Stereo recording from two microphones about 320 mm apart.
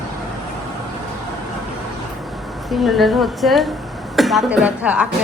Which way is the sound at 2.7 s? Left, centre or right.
Centre.